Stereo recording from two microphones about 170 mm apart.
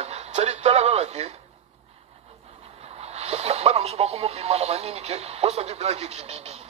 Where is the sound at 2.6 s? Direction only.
40° right (ahead or behind).